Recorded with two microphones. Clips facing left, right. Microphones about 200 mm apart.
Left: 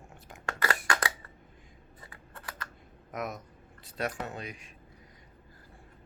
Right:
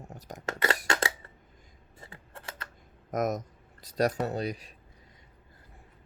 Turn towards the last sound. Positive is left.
turn(degrees=-35)  # may be behind; listen again after turning